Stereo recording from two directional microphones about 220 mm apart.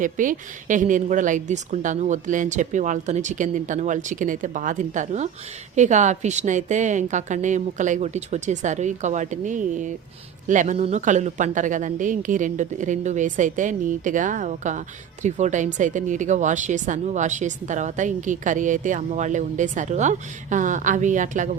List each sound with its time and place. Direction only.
0.0 s speech: 35° right (ahead or behind)